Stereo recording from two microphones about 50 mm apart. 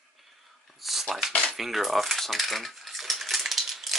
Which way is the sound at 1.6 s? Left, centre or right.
Centre.